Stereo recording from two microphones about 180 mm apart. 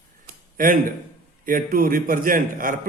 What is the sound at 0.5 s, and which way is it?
Speech, 50° right (ahead or behind).